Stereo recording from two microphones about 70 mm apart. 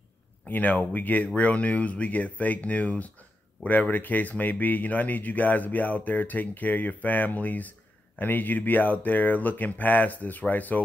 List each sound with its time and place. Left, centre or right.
0.5 s speech: left